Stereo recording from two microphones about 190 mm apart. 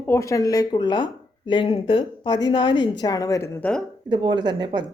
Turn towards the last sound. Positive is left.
turn(degrees=-25)  # may be behind; listen again after turning